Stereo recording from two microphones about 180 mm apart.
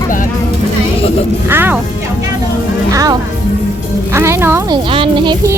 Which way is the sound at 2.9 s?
20° right (ahead or behind).